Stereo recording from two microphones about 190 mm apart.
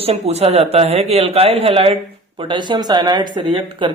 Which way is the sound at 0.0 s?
30° right (ahead or behind).